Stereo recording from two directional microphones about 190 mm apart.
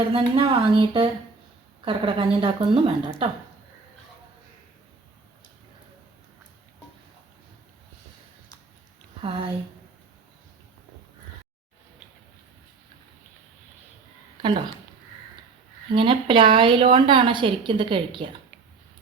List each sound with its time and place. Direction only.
0.1 s a woman's voice: 25° right (ahead or behind)
9.2 s a woman's voice: 30° right (ahead or behind)
15.9 s a woman's voice: 25° right (ahead or behind)